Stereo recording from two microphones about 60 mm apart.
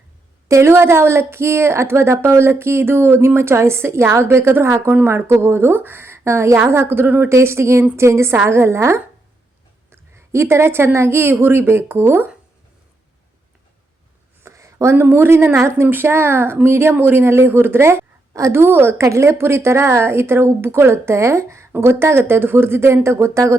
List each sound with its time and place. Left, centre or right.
0.4 s a woman's voice: right
7.3 s speech: right
14.4 s a sound: right
15.0 s a woman's voice: right
18.5 s a woman's voice: right
18.9 s speech: right